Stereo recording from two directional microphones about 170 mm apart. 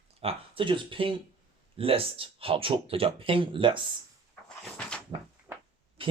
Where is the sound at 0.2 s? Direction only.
35° right (ahead or behind).